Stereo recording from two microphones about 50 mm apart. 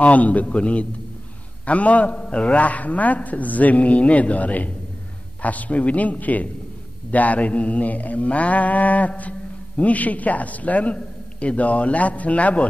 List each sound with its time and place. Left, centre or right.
0.0 s a man's voice: left
5.4 s mantra: left
9.8 s a man's voice: left